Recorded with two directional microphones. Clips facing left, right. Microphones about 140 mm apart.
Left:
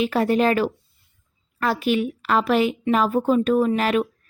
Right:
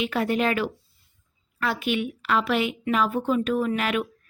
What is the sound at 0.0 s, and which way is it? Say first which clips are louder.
A woman's voice: left 5 dB; 40° left (ahead or behind).